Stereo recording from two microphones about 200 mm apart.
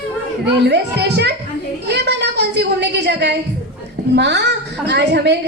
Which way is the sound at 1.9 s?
55° right (ahead or behind).